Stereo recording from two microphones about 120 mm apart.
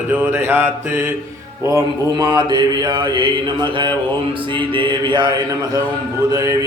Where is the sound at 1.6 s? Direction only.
30° right (ahead or behind).